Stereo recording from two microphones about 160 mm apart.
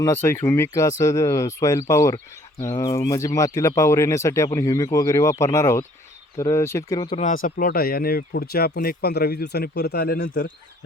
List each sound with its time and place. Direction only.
0.0 s speech: 15° left (ahead or behind)
7.2 s speech: 60° left (ahead or behind); by 10.5 s 80° left